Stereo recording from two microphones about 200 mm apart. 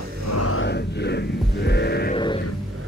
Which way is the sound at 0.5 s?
65° left (ahead or behind).